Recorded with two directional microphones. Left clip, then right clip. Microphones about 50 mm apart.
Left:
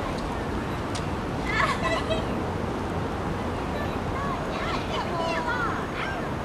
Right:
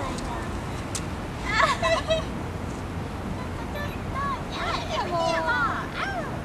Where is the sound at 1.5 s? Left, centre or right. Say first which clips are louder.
Right 3 dB; right.